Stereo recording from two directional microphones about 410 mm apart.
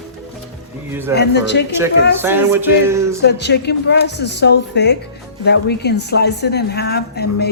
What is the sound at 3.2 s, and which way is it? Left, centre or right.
Speech, left.